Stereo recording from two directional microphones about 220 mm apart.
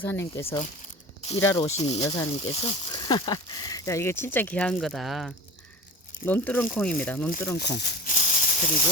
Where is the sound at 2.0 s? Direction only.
15° left (ahead or behind).